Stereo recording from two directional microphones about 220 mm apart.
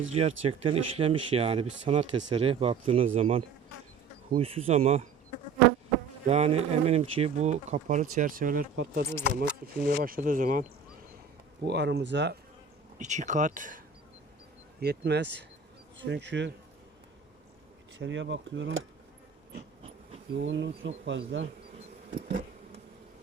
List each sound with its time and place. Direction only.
0.1 s speech: 30° right (ahead or behind)
6.2 s speech: 30° right (ahead or behind)
8.7 s speech: 50° right (ahead or behind)
11.7 s speech: 50° right (ahead or behind)
13.0 s speech: 35° right (ahead or behind)
14.8 s speech: 50° right (ahead or behind)
17.9 s speech: 55° right (ahead or behind)
20.3 s speech: 55° right (ahead or behind)